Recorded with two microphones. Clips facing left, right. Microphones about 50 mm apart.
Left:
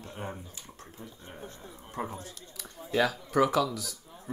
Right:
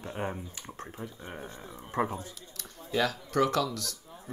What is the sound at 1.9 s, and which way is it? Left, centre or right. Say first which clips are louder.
Speech: right 6 dB; right.